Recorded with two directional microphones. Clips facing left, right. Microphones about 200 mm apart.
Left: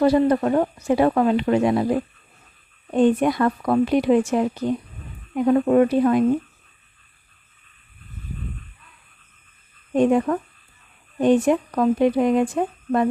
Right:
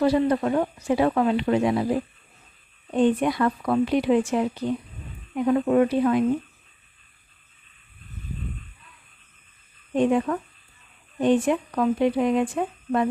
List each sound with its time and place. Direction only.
0.0 s speech: 45° left (ahead or behind)
9.9 s speech: 45° left (ahead or behind)